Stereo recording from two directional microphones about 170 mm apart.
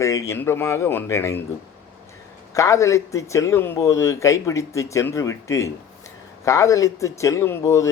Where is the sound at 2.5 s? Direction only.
20° left (ahead or behind).